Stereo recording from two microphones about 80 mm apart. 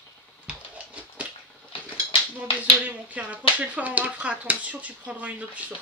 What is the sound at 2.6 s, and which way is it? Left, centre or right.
Speech, centre.